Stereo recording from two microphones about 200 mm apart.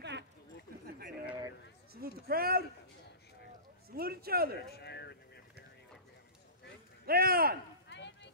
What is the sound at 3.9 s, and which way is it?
Speech, 50° right (ahead or behind).